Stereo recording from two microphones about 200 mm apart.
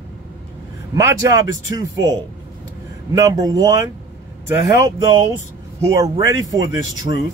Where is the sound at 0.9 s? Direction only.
15° right (ahead or behind).